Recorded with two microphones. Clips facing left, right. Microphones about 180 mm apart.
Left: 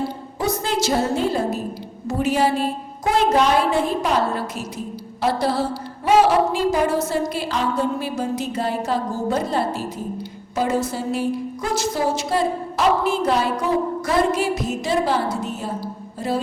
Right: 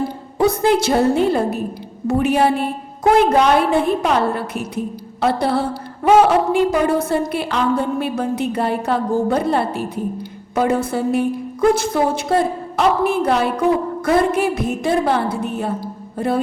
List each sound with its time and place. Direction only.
0.3 s a woman's voice: 60° right (ahead or behind)